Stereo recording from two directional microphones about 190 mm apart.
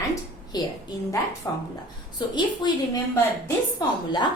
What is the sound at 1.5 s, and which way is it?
A woman's voice, 20° left (ahead or behind).